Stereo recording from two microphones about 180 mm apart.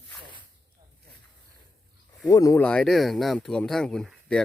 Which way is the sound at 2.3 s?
20° left (ahead or behind).